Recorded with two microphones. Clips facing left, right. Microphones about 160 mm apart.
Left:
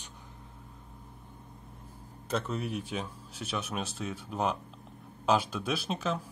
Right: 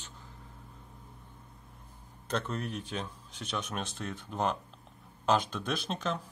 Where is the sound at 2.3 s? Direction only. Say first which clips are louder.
Left 2 dB; 10° left (ahead or behind).